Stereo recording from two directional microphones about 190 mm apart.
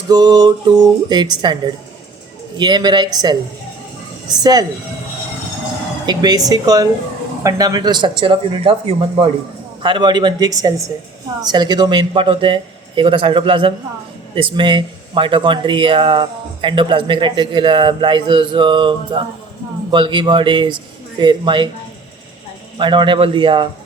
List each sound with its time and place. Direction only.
0.1 s speech: 20° right (ahead or behind)
6.1 s speech: 20° right (ahead or behind)
22.8 s speech: 25° right (ahead or behind)